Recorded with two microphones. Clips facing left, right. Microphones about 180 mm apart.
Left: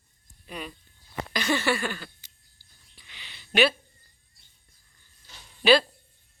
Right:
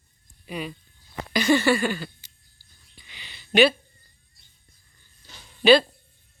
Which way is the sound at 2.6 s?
15° left (ahead or behind).